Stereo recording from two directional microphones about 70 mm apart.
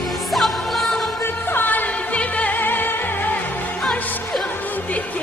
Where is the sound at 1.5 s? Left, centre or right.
Left.